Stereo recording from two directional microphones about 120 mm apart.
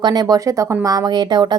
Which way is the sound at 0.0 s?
35° right (ahead or behind).